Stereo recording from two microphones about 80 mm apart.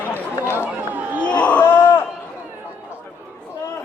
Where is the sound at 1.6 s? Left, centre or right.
Left.